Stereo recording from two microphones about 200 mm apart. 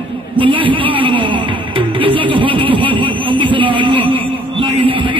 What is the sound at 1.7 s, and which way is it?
Music, 25° right (ahead or behind).